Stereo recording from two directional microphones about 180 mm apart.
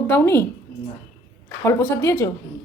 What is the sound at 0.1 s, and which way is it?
Speech, 15° left (ahead or behind).